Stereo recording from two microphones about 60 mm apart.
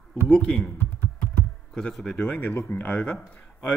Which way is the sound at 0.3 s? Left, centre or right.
Centre.